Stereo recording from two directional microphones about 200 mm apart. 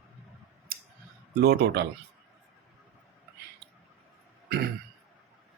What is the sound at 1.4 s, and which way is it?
Speech, 55° right (ahead or behind).